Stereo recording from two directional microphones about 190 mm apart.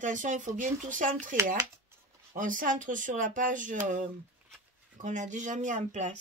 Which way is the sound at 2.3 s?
45° right (ahead or behind).